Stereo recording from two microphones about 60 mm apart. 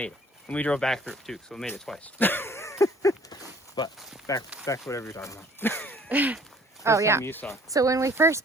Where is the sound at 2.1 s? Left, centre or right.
Left.